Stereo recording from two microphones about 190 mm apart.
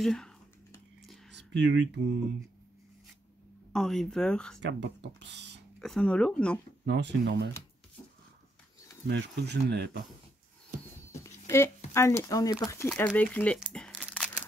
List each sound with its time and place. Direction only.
0.0 s speech: 5° left (ahead or behind)
1.0 s a sound: centre (ahead or behind)
1.3 s a sound: 65° right (ahead or behind)
3.7 s speech: centre (ahead or behind)
4.6 s speech: 70° right (ahead or behind)
5.8 s speech: 5° left (ahead or behind)
6.9 s speech: 65° right (ahead or behind)
9.0 s speech: 60° right (ahead or behind)
11.1 s a sound: 15° left (ahead or behind)
11.9 s speech: 15° left (ahead or behind)
13.6 s crumpling: centre (ahead or behind)